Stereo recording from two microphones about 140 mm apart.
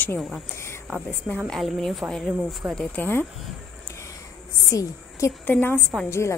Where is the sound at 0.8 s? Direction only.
Centre (ahead or behind); by 3.3 s 15° left (ahead or behind).